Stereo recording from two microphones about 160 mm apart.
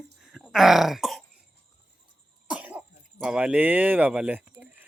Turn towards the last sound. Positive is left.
turn(degrees=-10)  # may be behind; listen again after turning